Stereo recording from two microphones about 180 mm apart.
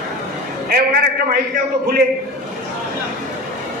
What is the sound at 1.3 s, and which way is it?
Speech, 55° right (ahead or behind).